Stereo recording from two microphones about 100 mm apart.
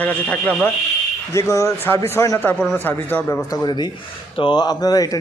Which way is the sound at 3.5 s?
40° left (ahead or behind).